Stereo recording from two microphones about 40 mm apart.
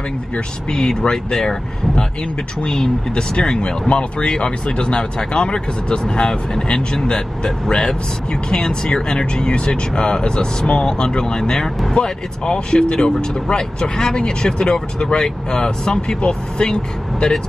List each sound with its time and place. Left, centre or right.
0.7 s speech: centre